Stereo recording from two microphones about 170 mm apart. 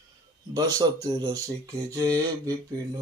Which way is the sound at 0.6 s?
20° right (ahead or behind).